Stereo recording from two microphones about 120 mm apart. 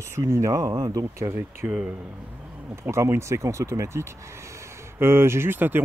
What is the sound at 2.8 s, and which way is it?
Speech, 20° right (ahead or behind).